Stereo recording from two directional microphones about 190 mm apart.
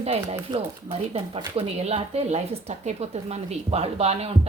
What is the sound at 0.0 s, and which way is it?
Speech, 35° right (ahead or behind).